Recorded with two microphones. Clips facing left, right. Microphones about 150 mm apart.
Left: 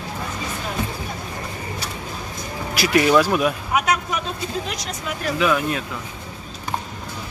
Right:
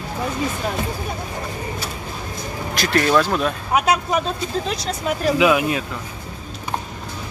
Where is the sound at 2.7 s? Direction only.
10° left (ahead or behind).